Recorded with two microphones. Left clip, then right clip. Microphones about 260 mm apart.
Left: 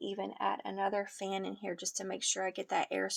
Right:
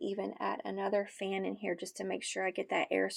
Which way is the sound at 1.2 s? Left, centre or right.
Left.